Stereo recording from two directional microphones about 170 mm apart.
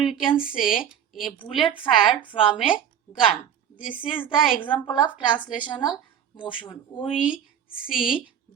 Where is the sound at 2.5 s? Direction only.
5° right (ahead or behind).